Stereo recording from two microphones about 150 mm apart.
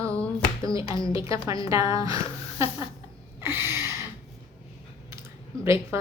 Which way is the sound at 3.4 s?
15° right (ahead or behind).